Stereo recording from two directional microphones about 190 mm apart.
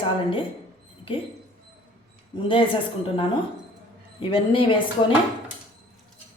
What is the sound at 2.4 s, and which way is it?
A woman's voice, 30° left (ahead or behind).